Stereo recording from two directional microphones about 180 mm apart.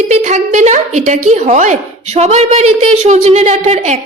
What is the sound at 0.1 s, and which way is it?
A woman's voice, 40° right (ahead or behind).